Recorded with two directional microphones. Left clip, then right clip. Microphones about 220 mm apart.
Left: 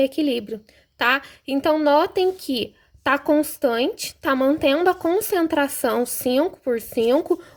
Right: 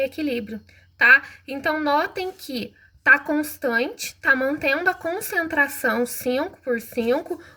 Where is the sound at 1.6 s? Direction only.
50° left (ahead or behind).